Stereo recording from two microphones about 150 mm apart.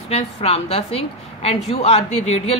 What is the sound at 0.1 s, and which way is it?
A woman's voice, 45° left (ahead or behind).